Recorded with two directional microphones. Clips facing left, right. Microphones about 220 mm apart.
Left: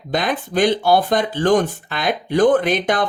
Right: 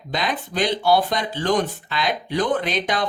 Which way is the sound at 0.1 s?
50° left (ahead or behind).